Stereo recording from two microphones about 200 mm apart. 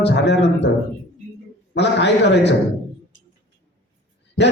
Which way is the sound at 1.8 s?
60° left (ahead or behind).